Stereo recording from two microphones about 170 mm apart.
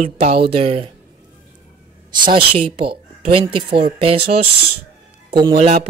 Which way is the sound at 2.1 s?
30° right (ahead or behind).